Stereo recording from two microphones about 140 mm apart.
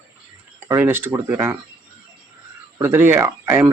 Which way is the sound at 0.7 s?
15° right (ahead or behind).